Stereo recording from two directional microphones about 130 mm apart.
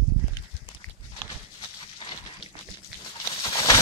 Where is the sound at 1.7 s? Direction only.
40° left (ahead or behind).